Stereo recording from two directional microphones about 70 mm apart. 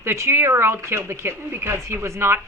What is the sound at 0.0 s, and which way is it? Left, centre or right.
A woman's voice, right.